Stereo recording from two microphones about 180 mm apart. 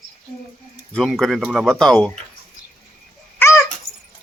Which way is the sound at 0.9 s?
5° left (ahead or behind).